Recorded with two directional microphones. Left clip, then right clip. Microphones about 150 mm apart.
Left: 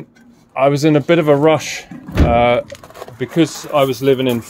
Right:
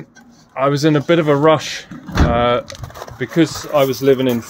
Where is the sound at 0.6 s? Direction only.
15° left (ahead or behind).